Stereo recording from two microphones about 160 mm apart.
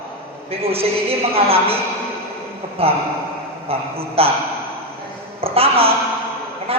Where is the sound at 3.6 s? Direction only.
35° right (ahead or behind).